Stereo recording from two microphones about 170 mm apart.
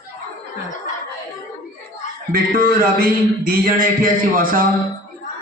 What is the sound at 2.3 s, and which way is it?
A man's voice, 60° right (ahead or behind).